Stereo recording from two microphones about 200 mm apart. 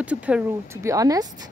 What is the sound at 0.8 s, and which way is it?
Speech, 15° right (ahead or behind).